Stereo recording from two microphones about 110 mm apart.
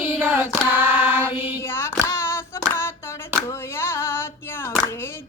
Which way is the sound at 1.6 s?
20° left (ahead or behind).